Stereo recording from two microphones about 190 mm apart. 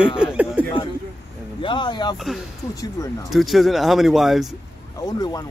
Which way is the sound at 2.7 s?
20° left (ahead or behind).